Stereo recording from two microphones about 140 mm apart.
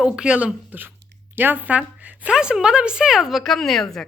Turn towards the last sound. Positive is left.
turn(degrees=0)  # may be behind; listen again after turning